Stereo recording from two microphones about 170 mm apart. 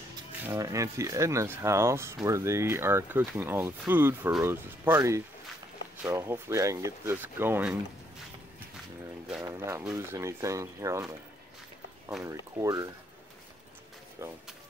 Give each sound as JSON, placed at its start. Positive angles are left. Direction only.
{"t": 0.5, "sound": "speech", "side_deg": -20}
{"t": 9.4, "sound": "speech", "side_deg": -15}
{"t": 12.2, "sound": "speech", "side_deg": -20}